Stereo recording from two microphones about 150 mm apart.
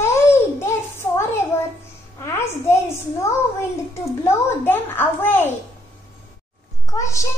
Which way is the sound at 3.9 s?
15° left (ahead or behind).